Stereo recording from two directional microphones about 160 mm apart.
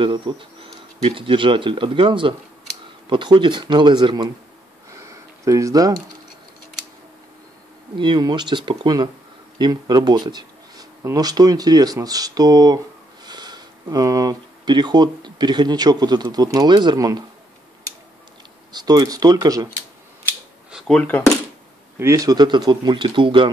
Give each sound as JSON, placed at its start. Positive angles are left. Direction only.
{"t": 0.0, "sound": "speech", "side_deg": -30}
{"t": 4.9, "sound": "a sound", "side_deg": -20}
{"t": 8.0, "sound": "speech", "side_deg": -30}
{"t": 18.7, "sound": "speech", "side_deg": -25}
{"t": 20.7, "sound": "speech", "side_deg": 5}
{"t": 21.9, "sound": "speech", "side_deg": -20}